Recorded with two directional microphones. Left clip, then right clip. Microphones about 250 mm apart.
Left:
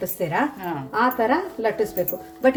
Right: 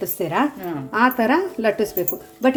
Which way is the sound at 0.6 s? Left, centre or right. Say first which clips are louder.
Even; centre.